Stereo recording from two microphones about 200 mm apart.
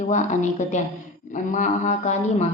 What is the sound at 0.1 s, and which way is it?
Speech, 35° left (ahead or behind).